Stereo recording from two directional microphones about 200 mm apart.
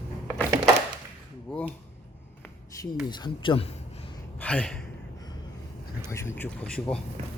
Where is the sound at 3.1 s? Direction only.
20° left (ahead or behind).